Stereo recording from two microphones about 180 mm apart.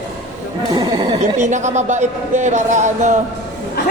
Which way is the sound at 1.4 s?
40° right (ahead or behind).